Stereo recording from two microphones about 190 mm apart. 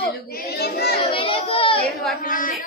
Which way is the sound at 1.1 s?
30° left (ahead or behind).